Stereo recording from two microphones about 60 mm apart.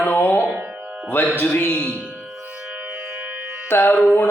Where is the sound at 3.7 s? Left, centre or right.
Left.